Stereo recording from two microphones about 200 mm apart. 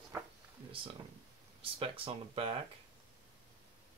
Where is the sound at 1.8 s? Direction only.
25° right (ahead or behind).